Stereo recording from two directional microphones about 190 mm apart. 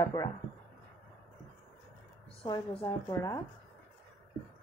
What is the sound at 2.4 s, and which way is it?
Speech, 15° left (ahead or behind).